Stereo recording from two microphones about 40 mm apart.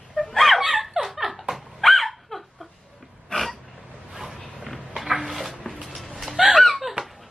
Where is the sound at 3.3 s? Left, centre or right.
Left.